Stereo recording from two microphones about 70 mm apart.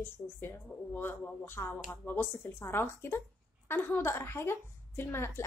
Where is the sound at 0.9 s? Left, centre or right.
Left.